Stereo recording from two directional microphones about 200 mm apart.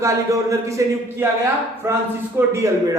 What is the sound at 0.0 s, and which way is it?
Speech, 15° right (ahead or behind).